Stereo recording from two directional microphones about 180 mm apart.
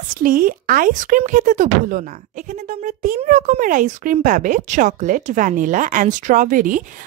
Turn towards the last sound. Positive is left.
turn(degrees=-45)  # may be behind; listen again after turning